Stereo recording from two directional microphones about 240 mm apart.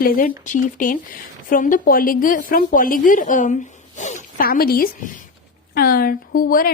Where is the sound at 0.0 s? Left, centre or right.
Left.